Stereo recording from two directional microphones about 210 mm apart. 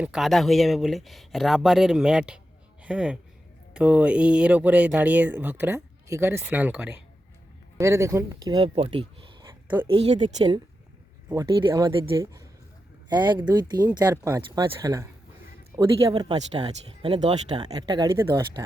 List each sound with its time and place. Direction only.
0.0 s speech: centre (ahead or behind); by 10.4 s 30° right (ahead or behind)
11.6 s speech: 20° right (ahead or behind)
16.3 s speech: 25° right (ahead or behind)